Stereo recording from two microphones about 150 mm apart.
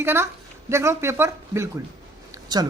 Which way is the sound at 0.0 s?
15° right (ahead or behind).